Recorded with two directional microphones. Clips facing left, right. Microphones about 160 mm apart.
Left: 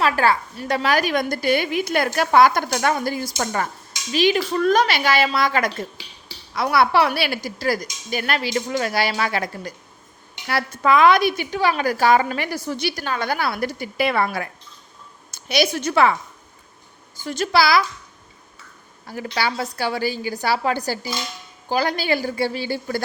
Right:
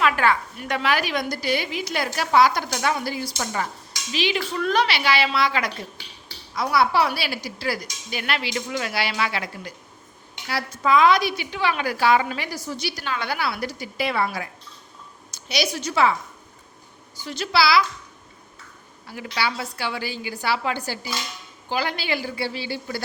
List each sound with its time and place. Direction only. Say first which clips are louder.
0.0 s a woman's voice: left 2 dB; 35° left (ahead or behind)
6.5 s a woman's voice: left 3 dB; 65° left (ahead or behind); by 9.7 s 45° left (ahead or behind)
10.5 s a woman's voice: left 2 dB; 60° left (ahead or behind)
17.2 s a woman's voice: left 3 dB; 45° left (ahead or behind)
19.0 s a woman's voice: left 3 dB; 40° left (ahead or behind)